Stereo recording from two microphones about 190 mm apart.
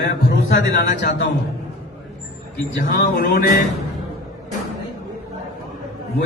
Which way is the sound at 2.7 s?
55° left (ahead or behind).